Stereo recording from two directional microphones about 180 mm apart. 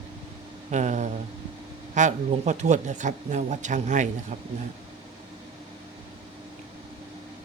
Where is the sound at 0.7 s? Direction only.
40° right (ahead or behind).